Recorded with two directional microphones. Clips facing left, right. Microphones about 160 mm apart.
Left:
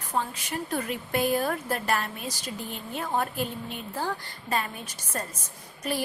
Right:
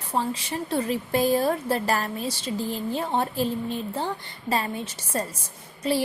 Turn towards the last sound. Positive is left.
turn(degrees=-30)  # may be behind; listen again after turning